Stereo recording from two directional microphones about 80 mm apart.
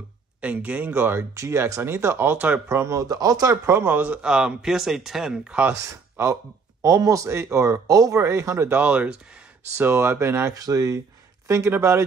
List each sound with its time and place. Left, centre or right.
0.4 s speech: centre
1.3 s speech: right
3.6 s speech: right
4.2 s speech: centre
5.8 s speech: right
8.7 s speech: centre
9.8 s speech: right
10.5 s speech: right
11.4 s speech: right